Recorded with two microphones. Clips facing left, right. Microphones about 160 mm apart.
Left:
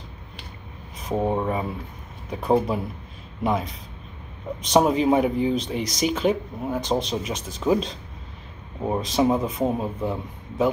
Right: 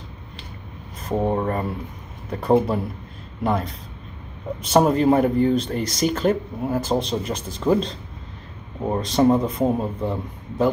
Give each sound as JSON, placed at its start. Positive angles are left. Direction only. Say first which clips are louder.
{"t": 1.0, "sound": "speech", "louder": "right 2 dB", "side_deg": 0}